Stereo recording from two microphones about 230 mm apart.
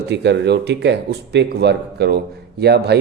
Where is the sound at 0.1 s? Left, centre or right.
Right.